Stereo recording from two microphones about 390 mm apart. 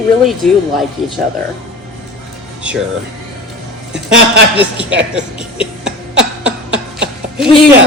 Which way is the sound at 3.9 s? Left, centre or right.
Right.